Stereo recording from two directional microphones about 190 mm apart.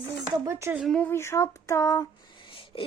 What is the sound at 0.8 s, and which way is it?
Speech, 5° left (ahead or behind).